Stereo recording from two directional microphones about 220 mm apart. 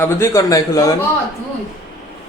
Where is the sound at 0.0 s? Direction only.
15° left (ahead or behind).